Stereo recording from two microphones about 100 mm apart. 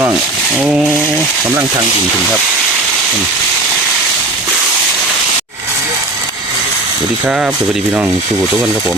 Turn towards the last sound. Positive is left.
turn(degrees=-10)  # may be behind; listen again after turning